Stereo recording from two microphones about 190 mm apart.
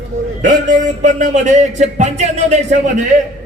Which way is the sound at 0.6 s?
40° right (ahead or behind).